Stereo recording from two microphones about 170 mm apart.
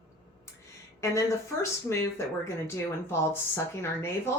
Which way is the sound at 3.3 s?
15° left (ahead or behind).